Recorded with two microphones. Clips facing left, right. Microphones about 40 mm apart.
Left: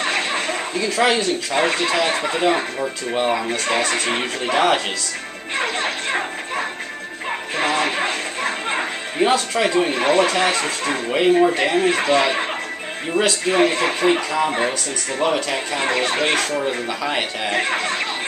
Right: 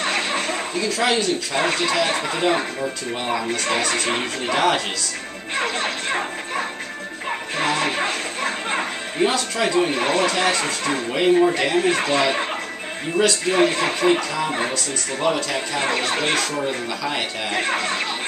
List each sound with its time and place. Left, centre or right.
0.0 s a sound: centre
0.8 s speech: centre
5.6 s music: centre
10.6 s speech: centre
13.5 s speech: centre
15.8 s speech: centre
17.6 s speech: centre